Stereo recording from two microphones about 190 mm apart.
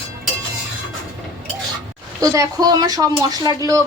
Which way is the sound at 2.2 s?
15° right (ahead or behind).